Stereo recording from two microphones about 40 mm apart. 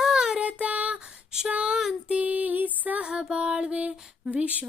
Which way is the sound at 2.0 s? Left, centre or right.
Right.